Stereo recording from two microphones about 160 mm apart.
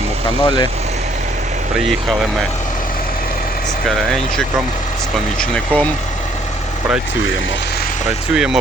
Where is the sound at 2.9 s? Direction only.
60° left (ahead or behind).